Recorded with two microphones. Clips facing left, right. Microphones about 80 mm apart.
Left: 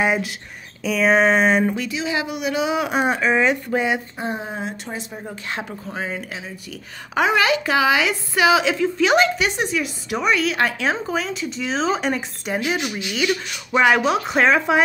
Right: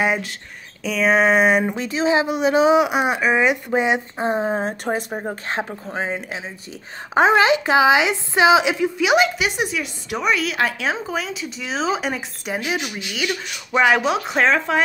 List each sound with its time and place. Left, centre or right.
0.0 s a woman's voice: centre
1.8 s speech: right
2.8 s speech: centre; by 4.7 s right
4.8 s speech: right
5.6 s a woman's voice: right; by 14.8 s centre